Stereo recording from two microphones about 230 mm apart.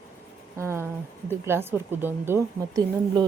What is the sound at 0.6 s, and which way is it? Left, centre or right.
Speech, centre.